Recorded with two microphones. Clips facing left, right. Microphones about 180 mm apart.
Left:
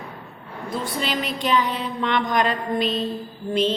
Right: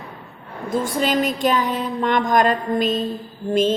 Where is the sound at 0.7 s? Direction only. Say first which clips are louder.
Right 6 dB; 45° right (ahead or behind).